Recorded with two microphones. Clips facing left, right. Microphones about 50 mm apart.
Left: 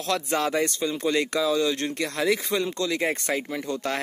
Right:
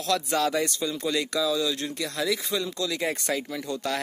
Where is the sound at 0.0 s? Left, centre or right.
Left.